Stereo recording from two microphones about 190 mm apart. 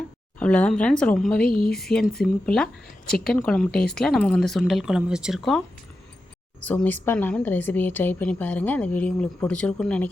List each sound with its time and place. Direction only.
0.3 s speech: 5° left (ahead or behind)
1.5 s speech: 50° left (ahead or behind)
1.8 s speech: 5° left (ahead or behind)